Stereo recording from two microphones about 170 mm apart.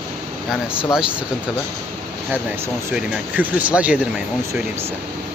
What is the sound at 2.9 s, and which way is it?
Speech, 5° right (ahead or behind).